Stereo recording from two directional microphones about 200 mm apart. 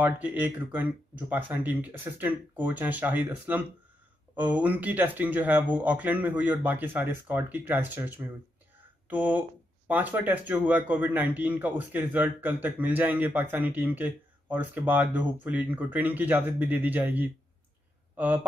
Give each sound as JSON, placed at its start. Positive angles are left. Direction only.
{"t": 0.0, "sound": "speech", "side_deg": -10}